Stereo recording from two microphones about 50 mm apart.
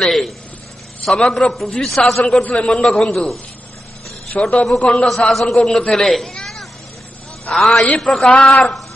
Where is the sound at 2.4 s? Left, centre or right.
Left.